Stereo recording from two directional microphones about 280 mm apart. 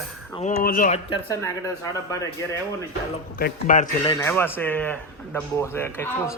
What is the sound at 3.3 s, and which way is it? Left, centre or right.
Speech, left.